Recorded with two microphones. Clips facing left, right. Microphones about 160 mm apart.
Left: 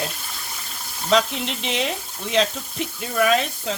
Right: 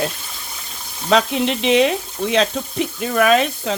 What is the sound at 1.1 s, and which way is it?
Speech, 65° right (ahead or behind).